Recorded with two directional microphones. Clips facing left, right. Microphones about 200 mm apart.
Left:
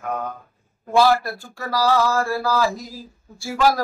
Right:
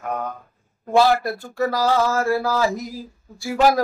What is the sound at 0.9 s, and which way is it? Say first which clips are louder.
Speech: even; 20° right (ahead or behind).